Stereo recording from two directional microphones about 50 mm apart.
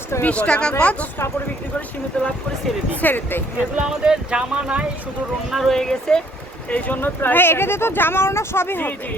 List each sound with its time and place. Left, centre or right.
0.2 s speech: left
2.1 s speech: left
3.0 s speech: left
3.8 s speech: centre
5.5 s speech: centre
5.7 s speech: centre
6.7 s speech: left